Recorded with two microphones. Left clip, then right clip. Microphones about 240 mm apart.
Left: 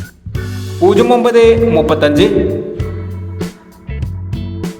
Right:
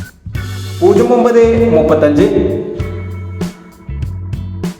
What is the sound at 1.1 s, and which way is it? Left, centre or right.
Music, left.